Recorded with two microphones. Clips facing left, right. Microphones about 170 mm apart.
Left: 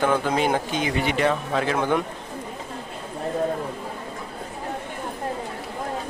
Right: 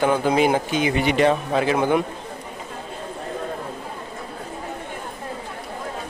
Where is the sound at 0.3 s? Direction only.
10° right (ahead or behind).